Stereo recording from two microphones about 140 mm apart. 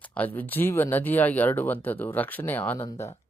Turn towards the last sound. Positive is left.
turn(degrees=20)  # may be behind; listen again after turning